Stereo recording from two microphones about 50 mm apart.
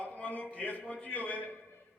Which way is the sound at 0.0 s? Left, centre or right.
Left.